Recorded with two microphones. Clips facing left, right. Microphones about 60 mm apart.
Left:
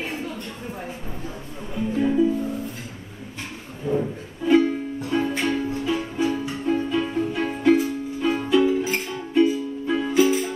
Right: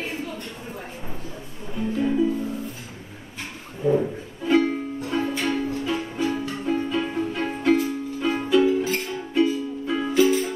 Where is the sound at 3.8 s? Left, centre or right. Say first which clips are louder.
Right 3 dB; right.